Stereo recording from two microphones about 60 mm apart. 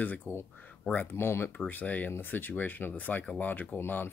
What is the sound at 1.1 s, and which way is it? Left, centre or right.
Speech, left.